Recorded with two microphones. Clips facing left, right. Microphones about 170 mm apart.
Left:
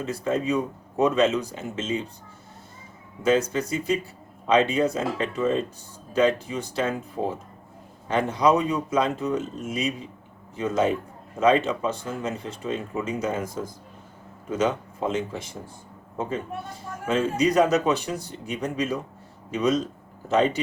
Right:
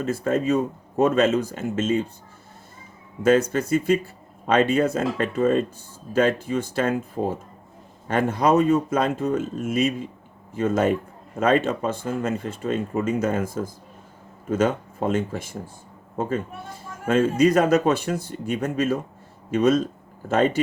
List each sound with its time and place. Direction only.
0.0 s speech: 50° right (ahead or behind)
3.2 s speech: 55° right (ahead or behind)
14.5 s speech: 50° right (ahead or behind)
17.1 s speech: 50° right (ahead or behind)